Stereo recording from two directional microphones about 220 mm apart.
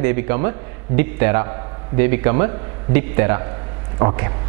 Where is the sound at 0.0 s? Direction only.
10° right (ahead or behind).